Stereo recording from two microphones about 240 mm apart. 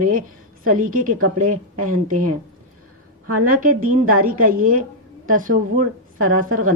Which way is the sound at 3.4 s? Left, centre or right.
Right.